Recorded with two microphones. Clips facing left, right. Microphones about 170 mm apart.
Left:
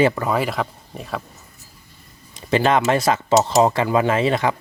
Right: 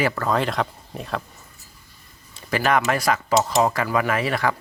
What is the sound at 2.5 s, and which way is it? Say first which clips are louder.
Speech: left 4 dB; 25° left (ahead or behind).